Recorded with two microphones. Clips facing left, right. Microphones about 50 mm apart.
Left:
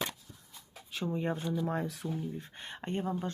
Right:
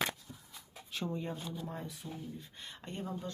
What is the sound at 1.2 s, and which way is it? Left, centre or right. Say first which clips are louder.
Speech: left 7 dB; left.